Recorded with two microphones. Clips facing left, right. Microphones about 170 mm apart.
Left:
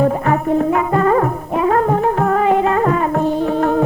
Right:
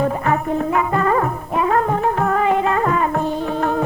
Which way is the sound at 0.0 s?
40° left (ahead or behind).